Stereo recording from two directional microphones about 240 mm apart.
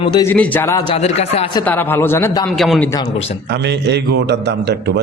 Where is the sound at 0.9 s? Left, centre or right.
Left.